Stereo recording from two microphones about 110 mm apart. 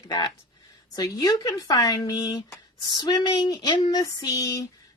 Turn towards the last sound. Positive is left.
turn(degrees=35)  # may be behind; listen again after turning